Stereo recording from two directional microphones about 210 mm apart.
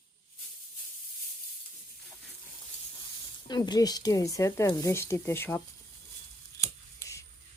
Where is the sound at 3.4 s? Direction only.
20° left (ahead or behind).